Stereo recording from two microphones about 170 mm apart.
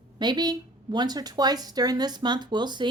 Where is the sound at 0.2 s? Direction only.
25° right (ahead or behind).